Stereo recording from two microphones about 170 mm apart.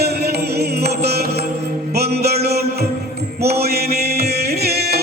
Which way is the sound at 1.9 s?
70° right (ahead or behind).